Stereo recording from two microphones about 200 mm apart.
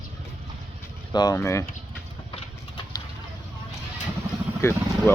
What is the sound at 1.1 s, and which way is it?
Speech, 20° left (ahead or behind).